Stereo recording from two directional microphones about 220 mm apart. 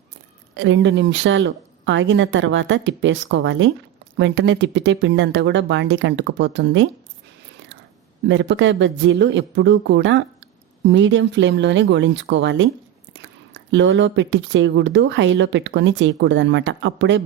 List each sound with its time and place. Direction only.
0.5 s speech: 55° right (ahead or behind)
8.3 s speech: 55° right (ahead or behind)